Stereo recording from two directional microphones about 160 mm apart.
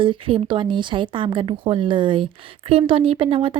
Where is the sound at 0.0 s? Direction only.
35° right (ahead or behind).